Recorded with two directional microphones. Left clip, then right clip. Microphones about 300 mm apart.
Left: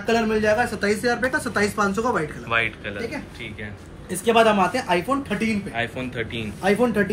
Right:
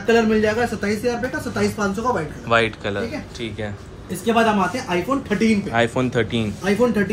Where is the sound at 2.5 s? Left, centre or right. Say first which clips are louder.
Right 5 dB; centre.